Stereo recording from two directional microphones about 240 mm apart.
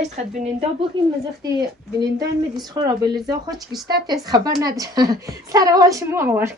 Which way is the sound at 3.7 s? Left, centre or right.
Centre.